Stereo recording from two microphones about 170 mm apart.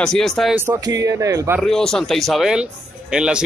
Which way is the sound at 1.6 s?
Centre (ahead or behind).